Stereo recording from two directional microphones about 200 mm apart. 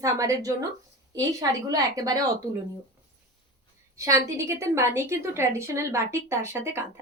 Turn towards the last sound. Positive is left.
turn(degrees=-15)  # may be behind; listen again after turning